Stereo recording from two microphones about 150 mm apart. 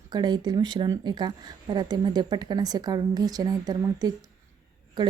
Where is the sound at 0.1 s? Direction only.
25° right (ahead or behind).